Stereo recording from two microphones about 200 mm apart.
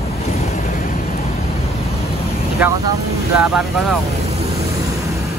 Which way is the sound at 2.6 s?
15° right (ahead or behind).